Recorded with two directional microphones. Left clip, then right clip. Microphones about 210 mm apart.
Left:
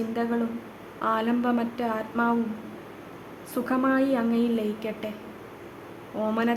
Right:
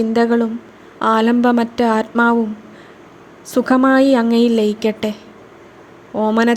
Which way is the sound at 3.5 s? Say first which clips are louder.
Right 12 dB; 35° right (ahead or behind).